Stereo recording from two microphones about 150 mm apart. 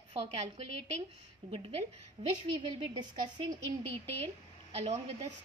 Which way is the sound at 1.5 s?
40° right (ahead or behind).